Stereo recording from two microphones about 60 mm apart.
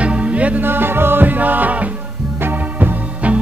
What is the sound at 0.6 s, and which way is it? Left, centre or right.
Music, right.